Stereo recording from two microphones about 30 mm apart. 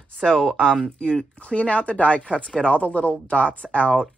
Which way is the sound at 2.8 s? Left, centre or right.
Left.